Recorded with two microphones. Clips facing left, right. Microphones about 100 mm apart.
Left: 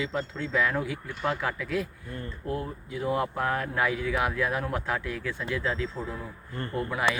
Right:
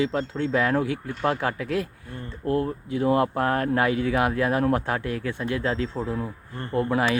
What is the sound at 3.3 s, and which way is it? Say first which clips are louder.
Speech: right 6 dB; 50° right (ahead or behind).